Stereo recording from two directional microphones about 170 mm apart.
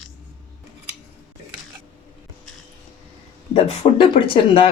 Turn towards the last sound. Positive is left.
turn(degrees=30)  # may be behind; listen again after turning